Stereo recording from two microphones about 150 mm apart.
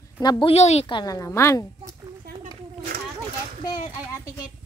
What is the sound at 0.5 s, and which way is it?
Speech, 45° left (ahead or behind).